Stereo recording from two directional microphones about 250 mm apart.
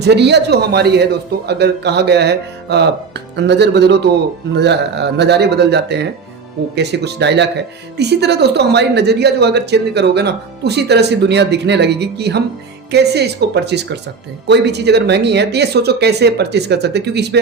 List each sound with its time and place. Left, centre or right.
0.0 s speech: right